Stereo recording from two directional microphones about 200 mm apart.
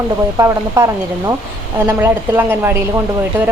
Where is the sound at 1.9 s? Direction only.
10° right (ahead or behind).